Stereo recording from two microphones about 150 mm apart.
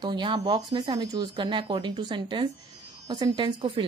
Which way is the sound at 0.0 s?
30° right (ahead or behind).